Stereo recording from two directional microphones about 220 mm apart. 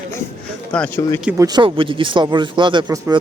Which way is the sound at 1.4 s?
20° right (ahead or behind).